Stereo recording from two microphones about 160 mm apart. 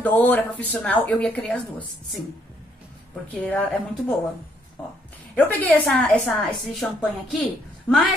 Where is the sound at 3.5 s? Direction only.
10° left (ahead or behind).